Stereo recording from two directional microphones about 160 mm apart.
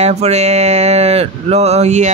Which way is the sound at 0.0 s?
45° right (ahead or behind).